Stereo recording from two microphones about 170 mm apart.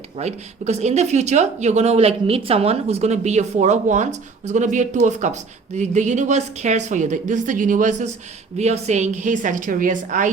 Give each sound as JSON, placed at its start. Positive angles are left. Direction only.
{"t": 0.2, "sound": "speech", "side_deg": -40}